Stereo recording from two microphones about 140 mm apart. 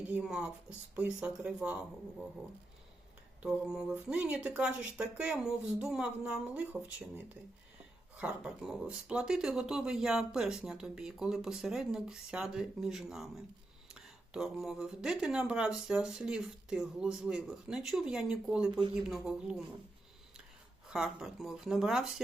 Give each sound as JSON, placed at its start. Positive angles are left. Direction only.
{"t": 0.0, "sound": "speech", "side_deg": -10}
{"t": 3.4, "sound": "speech", "side_deg": -5}
{"t": 20.8, "sound": "speech", "side_deg": -5}